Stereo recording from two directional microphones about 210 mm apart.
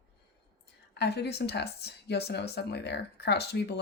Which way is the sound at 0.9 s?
50° left (ahead or behind).